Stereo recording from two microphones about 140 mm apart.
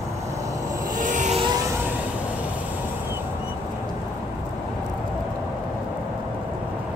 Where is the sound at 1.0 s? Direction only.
65° right (ahead or behind).